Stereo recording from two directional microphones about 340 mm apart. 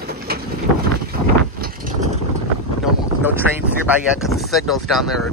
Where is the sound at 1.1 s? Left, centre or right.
Right.